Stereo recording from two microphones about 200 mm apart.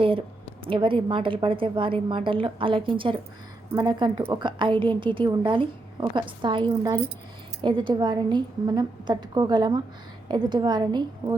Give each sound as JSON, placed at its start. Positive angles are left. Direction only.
{"t": 0.6, "sound": "a woman's voice", "side_deg": -25}